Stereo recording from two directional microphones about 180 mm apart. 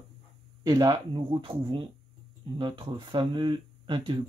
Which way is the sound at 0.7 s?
20° right (ahead or behind).